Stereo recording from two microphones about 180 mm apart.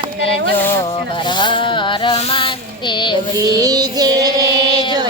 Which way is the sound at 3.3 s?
20° right (ahead or behind).